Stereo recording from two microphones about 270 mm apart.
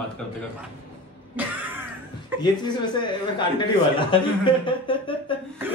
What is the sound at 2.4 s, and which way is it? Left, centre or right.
A man's voice, centre.